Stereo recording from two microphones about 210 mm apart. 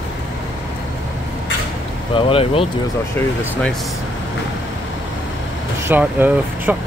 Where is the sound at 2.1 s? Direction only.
25° left (ahead or behind).